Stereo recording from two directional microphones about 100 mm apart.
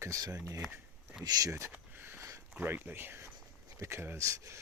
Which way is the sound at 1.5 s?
30° right (ahead or behind).